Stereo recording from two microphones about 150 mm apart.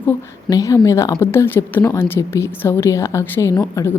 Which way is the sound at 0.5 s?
20° left (ahead or behind).